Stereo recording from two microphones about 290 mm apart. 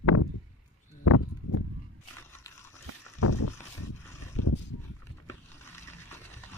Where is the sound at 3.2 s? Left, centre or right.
Left.